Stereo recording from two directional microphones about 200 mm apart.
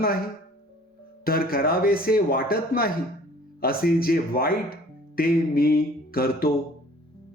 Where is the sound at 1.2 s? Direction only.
45° left (ahead or behind).